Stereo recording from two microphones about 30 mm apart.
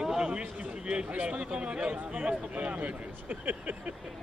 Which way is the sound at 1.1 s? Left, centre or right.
Right.